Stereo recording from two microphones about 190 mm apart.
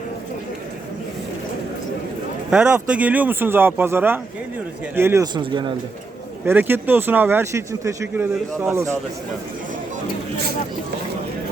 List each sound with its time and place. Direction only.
2.5 s speech: 5° right (ahead or behind); by 5.7 s 25° right (ahead or behind)
6.4 s speech: 10° right (ahead or behind)